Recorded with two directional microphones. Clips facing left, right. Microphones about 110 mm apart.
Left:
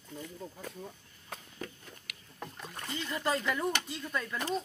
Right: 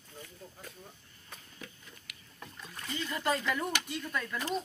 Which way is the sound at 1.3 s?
70° left (ahead or behind).